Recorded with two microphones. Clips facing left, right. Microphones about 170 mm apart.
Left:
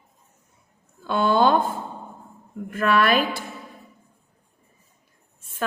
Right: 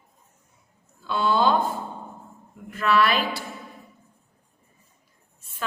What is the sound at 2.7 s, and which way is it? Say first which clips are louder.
Speech: left 2 dB; 50° left (ahead or behind).